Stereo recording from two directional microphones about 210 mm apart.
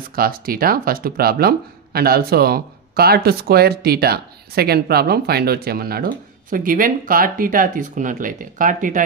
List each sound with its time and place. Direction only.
0.1 s speech: 45° right (ahead or behind)